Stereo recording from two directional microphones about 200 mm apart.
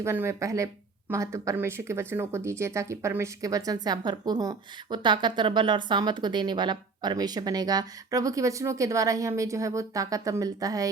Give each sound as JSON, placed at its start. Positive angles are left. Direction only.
{"t": 0.0, "sound": "speech", "side_deg": -15}